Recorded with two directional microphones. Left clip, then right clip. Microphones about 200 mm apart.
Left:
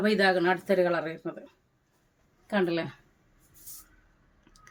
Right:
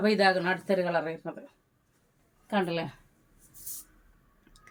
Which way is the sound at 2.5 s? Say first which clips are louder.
Left 2 dB; 25° left (ahead or behind).